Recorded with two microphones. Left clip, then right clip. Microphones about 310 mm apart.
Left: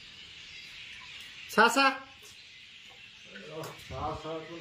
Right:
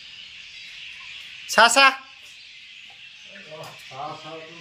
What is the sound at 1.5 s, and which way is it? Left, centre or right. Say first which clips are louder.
Speech: right 9 dB; centre.